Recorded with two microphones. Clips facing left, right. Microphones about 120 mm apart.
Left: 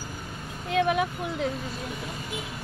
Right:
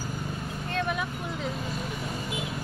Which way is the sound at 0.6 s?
75° left (ahead or behind).